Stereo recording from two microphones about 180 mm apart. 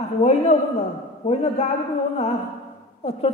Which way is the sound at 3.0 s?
35° left (ahead or behind).